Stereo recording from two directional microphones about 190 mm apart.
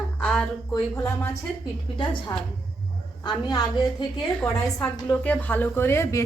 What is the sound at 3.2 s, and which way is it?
Speech, 20° left (ahead or behind).